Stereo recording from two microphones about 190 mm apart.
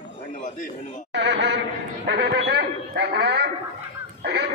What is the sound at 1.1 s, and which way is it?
A man's voice, 65° right (ahead or behind).